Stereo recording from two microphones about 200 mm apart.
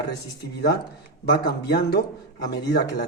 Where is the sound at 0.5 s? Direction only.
55° left (ahead or behind).